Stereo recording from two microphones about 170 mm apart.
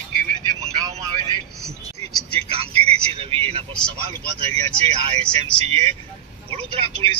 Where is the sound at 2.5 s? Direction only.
35° right (ahead or behind).